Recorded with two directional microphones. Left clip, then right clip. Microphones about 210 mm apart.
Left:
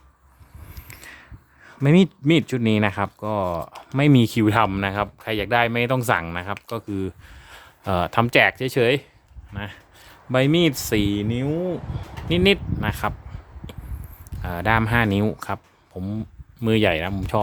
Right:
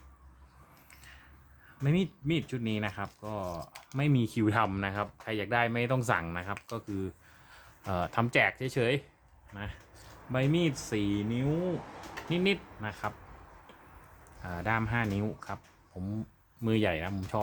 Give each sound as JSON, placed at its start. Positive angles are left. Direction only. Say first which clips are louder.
{"t": 0.9, "sound": "a sound", "louder": "left 13 dB", "side_deg": 55}
{"t": 1.8, "sound": "speech", "louder": "left 14 dB", "side_deg": 55}
{"t": 10.3, "sound": "speech", "louder": "left 11 dB", "side_deg": 55}
{"t": 14.4, "sound": "speech", "louder": "left 11 dB", "side_deg": 45}
{"t": 16.0, "sound": "speech", "louder": "left 9 dB", "side_deg": 30}